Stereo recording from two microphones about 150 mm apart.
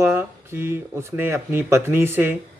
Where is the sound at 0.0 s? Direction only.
15° right (ahead or behind).